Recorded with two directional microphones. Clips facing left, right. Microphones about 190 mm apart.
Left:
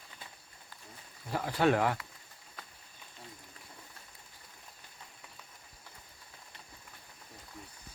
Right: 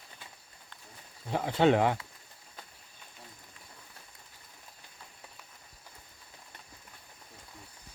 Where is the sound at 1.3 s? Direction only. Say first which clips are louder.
Right 3 dB; 20° right (ahead or behind).